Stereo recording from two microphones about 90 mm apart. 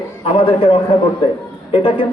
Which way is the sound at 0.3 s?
75° left (ahead or behind).